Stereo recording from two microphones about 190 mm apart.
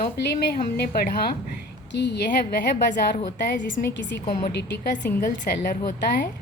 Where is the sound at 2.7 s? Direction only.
35° left (ahead or behind).